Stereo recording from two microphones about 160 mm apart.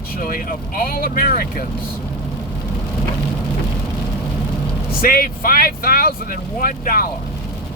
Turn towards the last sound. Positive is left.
turn(degrees=65)  # may be behind; listen again after turning